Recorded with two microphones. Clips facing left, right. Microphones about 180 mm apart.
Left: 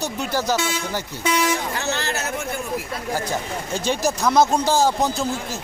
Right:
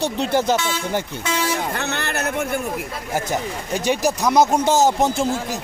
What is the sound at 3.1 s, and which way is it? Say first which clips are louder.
Speech: right 2 dB; 20° right (ahead or behind).